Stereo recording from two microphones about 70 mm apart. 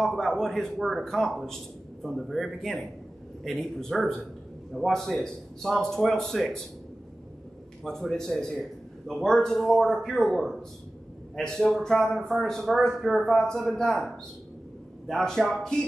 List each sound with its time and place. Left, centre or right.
0.0 s a man's voice: centre
7.8 s a man's voice: centre